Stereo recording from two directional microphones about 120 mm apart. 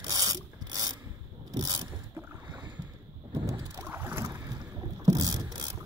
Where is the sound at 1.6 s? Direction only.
35° right (ahead or behind).